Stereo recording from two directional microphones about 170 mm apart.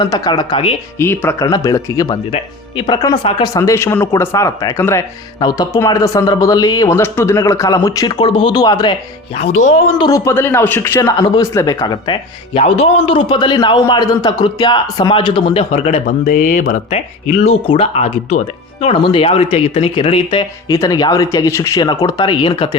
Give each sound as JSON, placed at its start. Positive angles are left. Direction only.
{"t": 0.0, "sound": "speech", "side_deg": 25}
{"t": 0.9, "sound": "speech", "side_deg": 15}
{"t": 2.3, "sound": "speech", "side_deg": 35}
{"t": 3.6, "sound": "speech", "side_deg": 15}
{"t": 9.3, "sound": "speech", "side_deg": 40}
{"t": 10.0, "sound": "speech", "side_deg": 20}
{"t": 16.2, "sound": "speech", "side_deg": 50}
{"t": 17.4, "sound": "speech", "side_deg": 35}
{"t": 20.7, "sound": "speech", "side_deg": 20}